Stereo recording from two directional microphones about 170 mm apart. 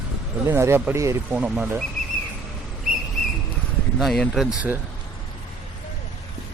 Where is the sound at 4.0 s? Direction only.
Centre (ahead or behind).